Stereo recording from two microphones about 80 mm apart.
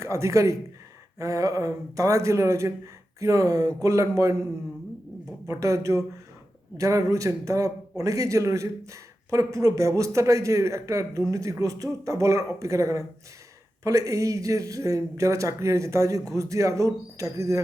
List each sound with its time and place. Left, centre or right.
0.0 s speech: right
5.5 s speech: right